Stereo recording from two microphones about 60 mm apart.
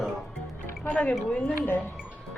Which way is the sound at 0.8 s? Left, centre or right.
Left.